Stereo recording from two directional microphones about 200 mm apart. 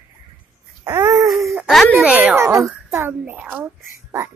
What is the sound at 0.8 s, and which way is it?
Wail, 15° right (ahead or behind).